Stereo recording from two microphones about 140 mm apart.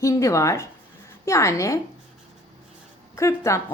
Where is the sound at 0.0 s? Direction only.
20° left (ahead or behind).